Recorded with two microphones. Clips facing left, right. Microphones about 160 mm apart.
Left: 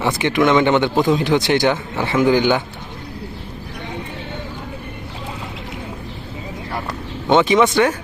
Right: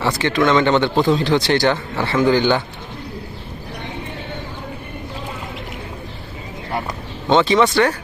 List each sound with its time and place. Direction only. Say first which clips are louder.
0.0 s a man's voice: left 1 dB; 15° left (ahead or behind)
7.3 s a man's voice: left 1 dB; 15° left (ahead or behind)